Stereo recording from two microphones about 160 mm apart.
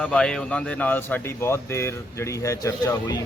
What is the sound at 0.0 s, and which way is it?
Speech, 5° left (ahead or behind).